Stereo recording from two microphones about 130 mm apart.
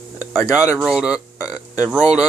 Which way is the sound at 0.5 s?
5° right (ahead or behind).